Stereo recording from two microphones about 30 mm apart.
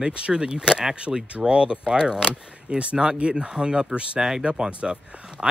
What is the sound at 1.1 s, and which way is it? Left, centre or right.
Speech, right.